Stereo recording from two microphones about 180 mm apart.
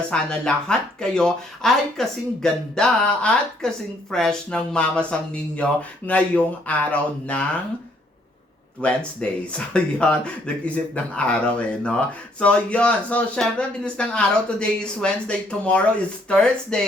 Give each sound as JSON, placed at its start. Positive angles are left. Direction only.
{"t": 0.1, "sound": "speech", "side_deg": 5}
{"t": 8.8, "sound": "speech", "side_deg": 5}